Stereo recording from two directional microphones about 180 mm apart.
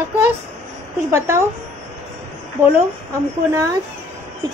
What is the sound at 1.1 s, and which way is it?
Speech, 15° right (ahead or behind).